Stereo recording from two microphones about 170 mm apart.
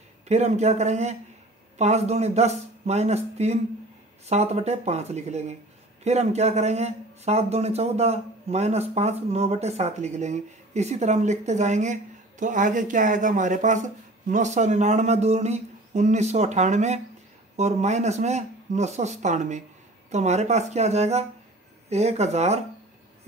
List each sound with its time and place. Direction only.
0.3 s a man's voice: 40° right (ahead or behind)